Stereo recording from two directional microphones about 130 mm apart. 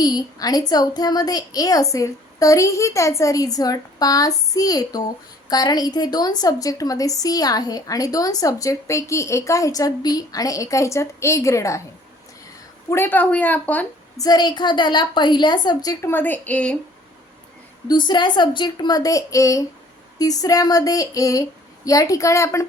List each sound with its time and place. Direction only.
0.0 s a woman's voice: 30° left (ahead or behind)
12.9 s a woman's voice: 15° left (ahead or behind)
14.2 s a woman's voice: 30° left (ahead or behind); by 16.7 s 10° left (ahead or behind)
17.8 s a woman's voice: 35° left (ahead or behind)